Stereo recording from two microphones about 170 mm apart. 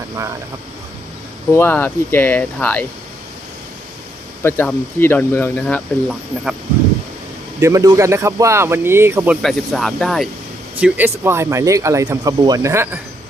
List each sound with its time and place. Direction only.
1.5 s speech: 15° left (ahead or behind)
4.4 s speech: 10° left (ahead or behind)
7.6 s speech: 20° right (ahead or behind)
9.4 s speech: centre (ahead or behind)
10.8 s speech: 10° right (ahead or behind)